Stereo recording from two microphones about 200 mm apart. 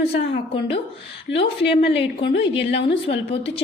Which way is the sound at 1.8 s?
30° left (ahead or behind).